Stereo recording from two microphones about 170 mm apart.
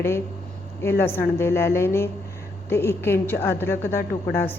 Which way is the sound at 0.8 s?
15° left (ahead or behind).